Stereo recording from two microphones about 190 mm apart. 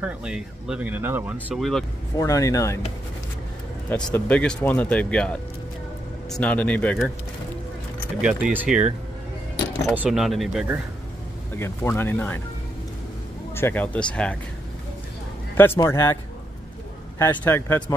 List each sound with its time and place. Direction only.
0.0 s speech: 5° right (ahead or behind)
2.1 s speech: 15° left (ahead or behind)
3.9 s speech: 5° left (ahead or behind)
8.2 s speech: 5° right (ahead or behind)
9.9 s speech: 5° right (ahead or behind)
11.5 s speech: 15° left (ahead or behind)
13.6 s speech: 10° left (ahead or behind)
15.5 s speech: 10° left (ahead or behind)
17.2 s speech: 10° left (ahead or behind)